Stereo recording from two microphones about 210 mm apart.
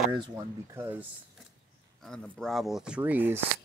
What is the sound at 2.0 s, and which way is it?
Speech, 5° left (ahead or behind).